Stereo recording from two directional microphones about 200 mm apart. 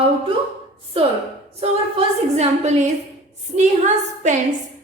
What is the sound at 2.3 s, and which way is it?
Speech, 30° right (ahead or behind).